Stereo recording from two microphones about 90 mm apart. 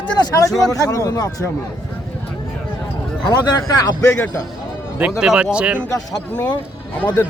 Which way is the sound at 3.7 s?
45° left (ahead or behind).